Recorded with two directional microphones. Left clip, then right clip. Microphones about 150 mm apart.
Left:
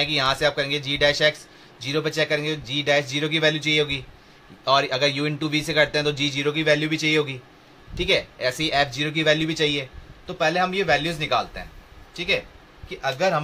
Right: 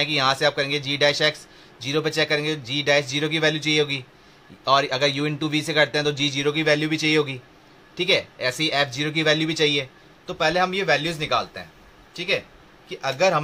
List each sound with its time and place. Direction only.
0.0 s a man's voice: 20° right (ahead or behind)